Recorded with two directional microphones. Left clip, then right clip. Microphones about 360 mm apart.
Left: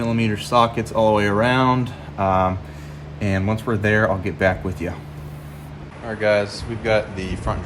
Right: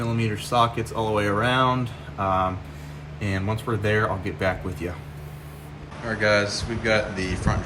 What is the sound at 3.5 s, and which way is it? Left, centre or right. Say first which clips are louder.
Speech: left 4 dB; left.